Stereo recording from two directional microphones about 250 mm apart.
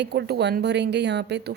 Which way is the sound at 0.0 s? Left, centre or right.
Right.